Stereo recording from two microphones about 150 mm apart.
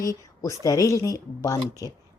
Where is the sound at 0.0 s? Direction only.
20° left (ahead or behind).